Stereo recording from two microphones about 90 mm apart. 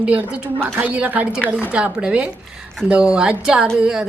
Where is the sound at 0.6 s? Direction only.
20° right (ahead or behind).